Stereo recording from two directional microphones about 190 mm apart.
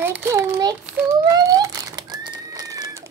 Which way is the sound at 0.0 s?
10° right (ahead or behind).